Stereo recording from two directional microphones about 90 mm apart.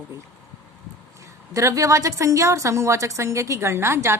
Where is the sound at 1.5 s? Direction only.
35° right (ahead or behind).